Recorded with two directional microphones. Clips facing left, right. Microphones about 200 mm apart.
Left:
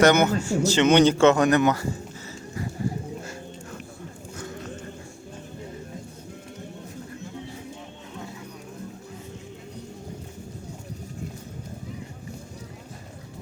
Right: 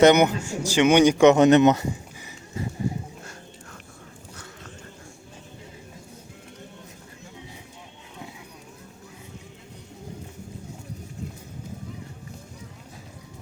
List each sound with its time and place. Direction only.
0.0 s speech: 15° right (ahead or behind)